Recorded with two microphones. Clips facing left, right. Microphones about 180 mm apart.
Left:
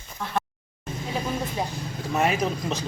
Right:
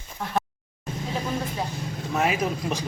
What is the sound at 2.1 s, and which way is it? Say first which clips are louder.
Speech: left 1 dB; centre (ahead or behind).